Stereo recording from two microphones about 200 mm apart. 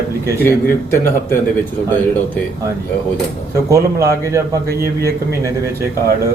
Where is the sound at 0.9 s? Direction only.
10° left (ahead or behind).